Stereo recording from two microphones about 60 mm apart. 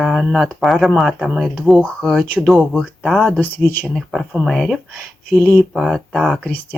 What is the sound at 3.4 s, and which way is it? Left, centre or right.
Speech, left.